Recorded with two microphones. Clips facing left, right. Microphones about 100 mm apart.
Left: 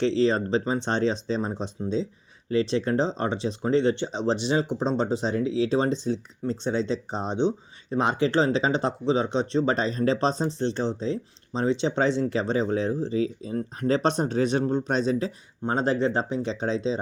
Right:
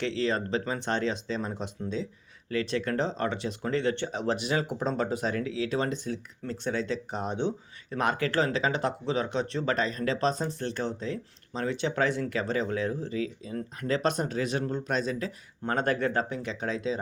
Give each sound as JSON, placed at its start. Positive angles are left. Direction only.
{"t": 0.0, "sound": "speech", "side_deg": 30}